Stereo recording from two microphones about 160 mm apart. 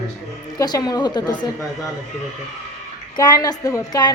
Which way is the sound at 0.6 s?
25° left (ahead or behind).